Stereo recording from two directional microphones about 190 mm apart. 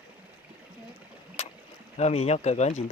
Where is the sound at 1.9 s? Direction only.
35° left (ahead or behind).